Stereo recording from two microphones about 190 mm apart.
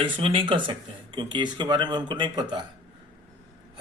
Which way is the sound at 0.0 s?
25° right (ahead or behind).